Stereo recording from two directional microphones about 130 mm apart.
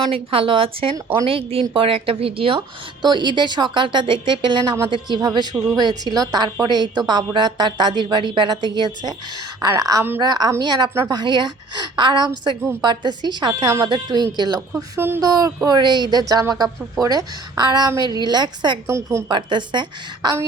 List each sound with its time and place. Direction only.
0.1 s a woman's voice: 45° right (ahead or behind)
14.8 s speech: 20° right (ahead or behind)
15.2 s a woman's voice: 30° right (ahead or behind)
18.9 s speech: 20° right (ahead or behind)
19.3 s a woman's voice: 35° right (ahead or behind)